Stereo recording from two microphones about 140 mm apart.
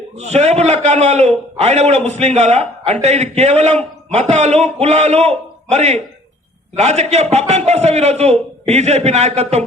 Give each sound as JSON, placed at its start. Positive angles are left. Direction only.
{"t": 0.2, "sound": "a man's voice", "side_deg": -50}